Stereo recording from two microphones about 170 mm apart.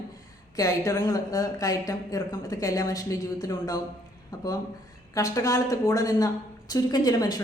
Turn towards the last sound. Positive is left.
turn(degrees=20)  # may be behind; listen again after turning